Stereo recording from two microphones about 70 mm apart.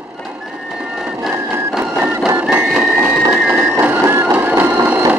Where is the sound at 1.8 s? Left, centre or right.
Right.